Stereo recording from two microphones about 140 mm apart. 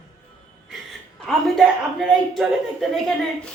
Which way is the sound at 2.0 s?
Centre (ahead or behind).